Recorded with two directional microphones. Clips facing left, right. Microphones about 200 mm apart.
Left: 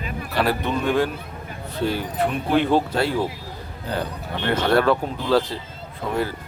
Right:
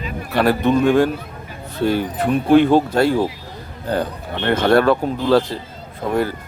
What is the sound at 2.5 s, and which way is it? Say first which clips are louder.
Speech: right 8 dB; 45° right (ahead or behind).